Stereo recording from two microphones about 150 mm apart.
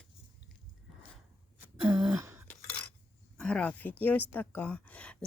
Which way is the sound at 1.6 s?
5° right (ahead or behind).